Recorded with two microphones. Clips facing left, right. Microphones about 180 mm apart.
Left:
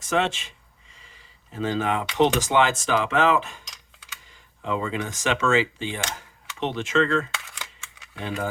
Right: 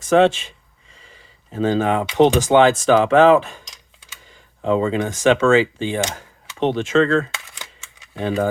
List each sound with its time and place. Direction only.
0.1 s speech: 35° right (ahead or behind)
1.7 s speech: 40° right (ahead or behind)
2.3 s speech: 30° right (ahead or behind)
4.6 s speech: 35° right (ahead or behind)
6.6 s speech: 45° right (ahead or behind)
6.8 s speech: 35° right (ahead or behind)